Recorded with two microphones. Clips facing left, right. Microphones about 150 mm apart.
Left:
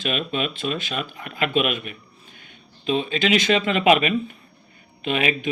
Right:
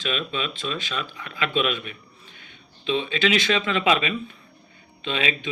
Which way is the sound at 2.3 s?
45° left (ahead or behind).